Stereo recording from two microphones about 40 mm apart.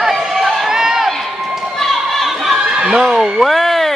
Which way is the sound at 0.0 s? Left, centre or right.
Centre.